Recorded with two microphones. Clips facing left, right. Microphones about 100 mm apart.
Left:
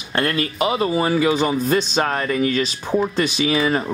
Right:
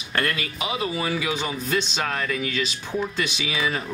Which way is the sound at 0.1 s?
30° left (ahead or behind).